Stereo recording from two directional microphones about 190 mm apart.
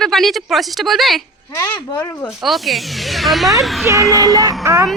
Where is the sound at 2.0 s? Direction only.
15° left (ahead or behind).